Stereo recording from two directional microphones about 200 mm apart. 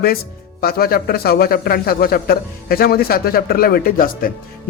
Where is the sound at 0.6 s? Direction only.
50° left (ahead or behind).